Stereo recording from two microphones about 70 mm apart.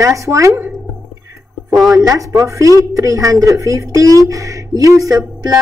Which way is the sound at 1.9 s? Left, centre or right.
Right.